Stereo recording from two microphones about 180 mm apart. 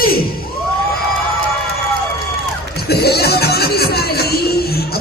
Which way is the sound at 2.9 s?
60° left (ahead or behind).